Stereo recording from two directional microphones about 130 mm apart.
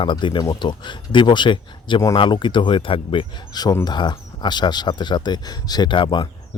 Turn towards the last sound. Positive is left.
turn(degrees=35)  # may be behind; listen again after turning